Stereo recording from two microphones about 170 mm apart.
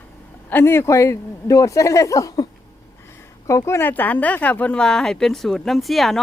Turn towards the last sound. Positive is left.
turn(degrees=0)  # may be behind; listen again after turning